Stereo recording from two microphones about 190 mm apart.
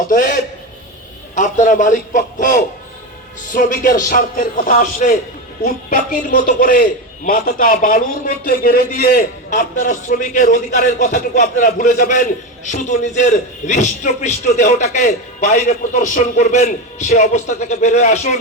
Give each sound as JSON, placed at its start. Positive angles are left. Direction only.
{"t": 0.1, "sound": "speech", "side_deg": 45}
{"t": 1.4, "sound": "a man's voice", "side_deg": 40}